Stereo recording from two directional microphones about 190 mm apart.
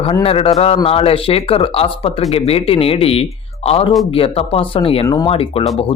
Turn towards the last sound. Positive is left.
turn(degrees=30)  # may be behind; listen again after turning